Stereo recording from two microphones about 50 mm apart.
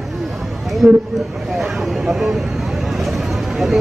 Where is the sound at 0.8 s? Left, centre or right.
Right.